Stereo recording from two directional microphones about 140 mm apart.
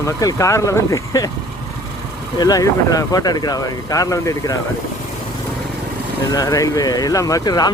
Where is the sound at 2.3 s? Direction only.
25° left (ahead or behind).